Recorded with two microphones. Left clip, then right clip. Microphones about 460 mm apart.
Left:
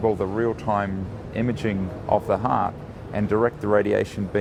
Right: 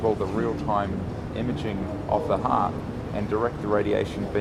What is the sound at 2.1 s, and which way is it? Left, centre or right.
Speech, left.